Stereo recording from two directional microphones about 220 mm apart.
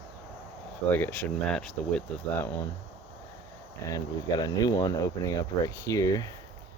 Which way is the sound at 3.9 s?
15° left (ahead or behind).